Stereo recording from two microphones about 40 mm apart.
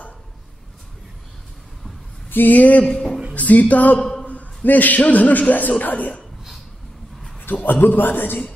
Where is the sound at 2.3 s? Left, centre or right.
Left.